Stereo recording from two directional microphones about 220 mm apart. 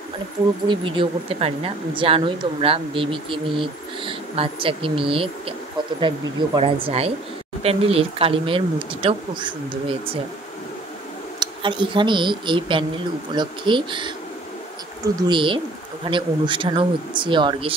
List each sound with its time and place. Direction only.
0.7 s speech: 25° right (ahead or behind)
11.3 s speech: 20° right (ahead or behind)
15.1 s speech: 20° right (ahead or behind)